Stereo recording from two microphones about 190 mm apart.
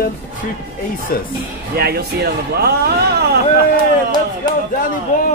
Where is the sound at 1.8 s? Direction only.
55° right (ahead or behind).